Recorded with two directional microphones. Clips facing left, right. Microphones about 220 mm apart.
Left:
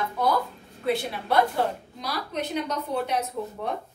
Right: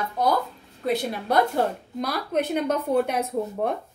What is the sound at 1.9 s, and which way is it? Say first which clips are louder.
A woman's voice: right 6 dB; 55° right (ahead or behind).